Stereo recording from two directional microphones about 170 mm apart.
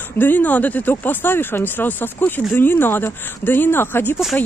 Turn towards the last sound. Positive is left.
turn(degrees=15)  # may be behind; listen again after turning